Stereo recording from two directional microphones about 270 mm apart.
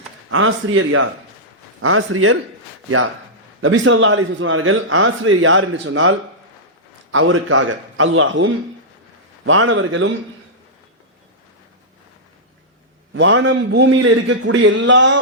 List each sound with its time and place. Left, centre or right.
0.3 s a man's voice: right
3.6 s a man's voice: right
13.1 s a man's voice: right